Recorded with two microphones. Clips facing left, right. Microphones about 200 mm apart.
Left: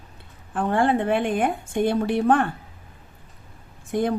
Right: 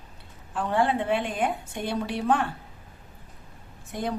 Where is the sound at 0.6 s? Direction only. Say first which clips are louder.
Left 4 dB; 55° left (ahead or behind).